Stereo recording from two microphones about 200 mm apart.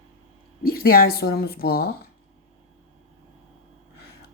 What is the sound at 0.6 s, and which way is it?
Speech, 50° left (ahead or behind).